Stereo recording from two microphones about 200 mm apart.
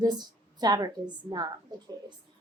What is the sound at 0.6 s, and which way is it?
Speech, 20° right (ahead or behind).